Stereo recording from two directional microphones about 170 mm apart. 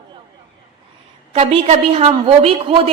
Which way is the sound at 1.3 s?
35° right (ahead or behind).